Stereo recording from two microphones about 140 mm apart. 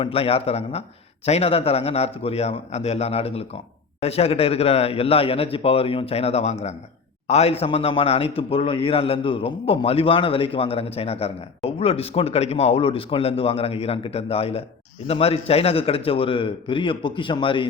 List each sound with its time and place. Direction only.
0.0 s a man's voice: 45° left (ahead or behind)